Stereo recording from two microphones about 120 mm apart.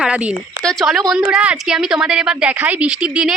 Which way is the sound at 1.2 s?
10° right (ahead or behind).